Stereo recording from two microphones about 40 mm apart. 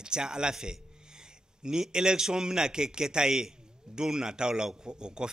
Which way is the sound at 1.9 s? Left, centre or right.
Centre.